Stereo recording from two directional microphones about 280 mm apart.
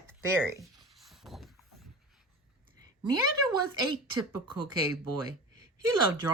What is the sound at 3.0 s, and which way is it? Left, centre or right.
Speech, left.